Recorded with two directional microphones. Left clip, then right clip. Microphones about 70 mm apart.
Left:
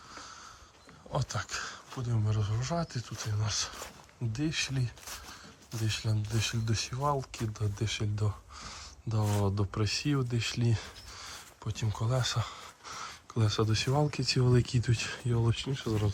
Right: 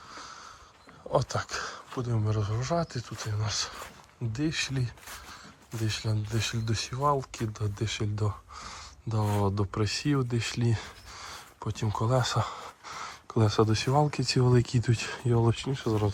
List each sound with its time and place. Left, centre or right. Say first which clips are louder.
0.1 s wheeze: right 3 dB; left
1.1 s speech: right 7 dB; centre; by 3.3 s left
3.3 s speech: right 2 dB; left
8.0 s speech: right 4 dB; left
8.3 s a sound: right 4 dB; left
9.4 s speech: right 4 dB; left
11.3 s speech: right 4 dB; centre
12.8 s a sound: even; left
13.2 s speech: right 7 dB; centre
13.7 s speech: right 4 dB; left
14.8 s speech: right 3 dB; centre